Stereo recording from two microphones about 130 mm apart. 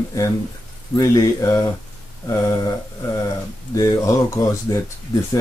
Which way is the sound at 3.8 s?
25° left (ahead or behind).